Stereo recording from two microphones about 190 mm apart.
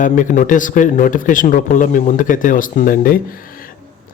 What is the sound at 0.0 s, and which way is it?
Speech, 40° left (ahead or behind).